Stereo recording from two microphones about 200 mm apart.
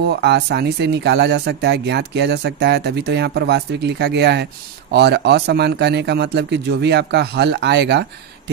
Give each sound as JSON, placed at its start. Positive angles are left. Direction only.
{"t": 0.0, "sound": "speech", "side_deg": -55}